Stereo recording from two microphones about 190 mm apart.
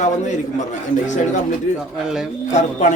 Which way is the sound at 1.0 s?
40° left (ahead or behind).